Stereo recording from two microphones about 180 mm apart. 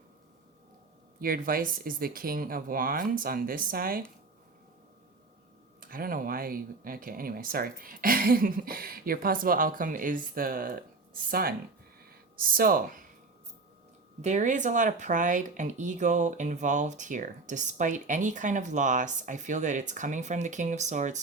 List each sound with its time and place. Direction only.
1.2 s speech: 55° right (ahead or behind)
5.8 s speech: 50° right (ahead or behind)
12.0 s a sound: 55° right (ahead or behind)
14.2 s speech: 40° right (ahead or behind)